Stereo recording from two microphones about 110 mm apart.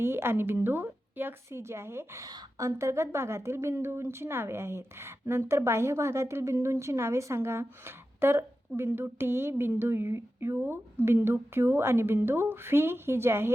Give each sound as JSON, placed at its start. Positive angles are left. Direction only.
{"t": 0.0, "sound": "a woman's voice", "side_deg": -20}